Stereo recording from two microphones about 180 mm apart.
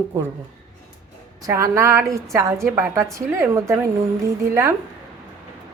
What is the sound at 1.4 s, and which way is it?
A woman's voice, 15° right (ahead or behind).